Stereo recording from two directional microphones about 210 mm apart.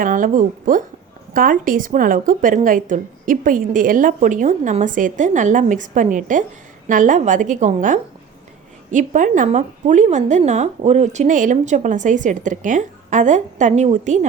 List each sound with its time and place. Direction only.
0.0 s a woman's voice: 40° right (ahead or behind)